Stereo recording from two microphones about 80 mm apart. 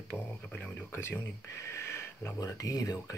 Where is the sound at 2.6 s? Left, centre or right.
Left.